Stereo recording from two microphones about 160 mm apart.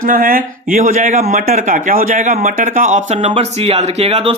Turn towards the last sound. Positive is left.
turn(degrees=-40)  # may be behind; listen again after turning